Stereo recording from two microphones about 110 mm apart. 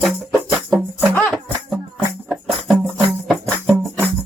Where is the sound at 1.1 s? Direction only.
15° left (ahead or behind).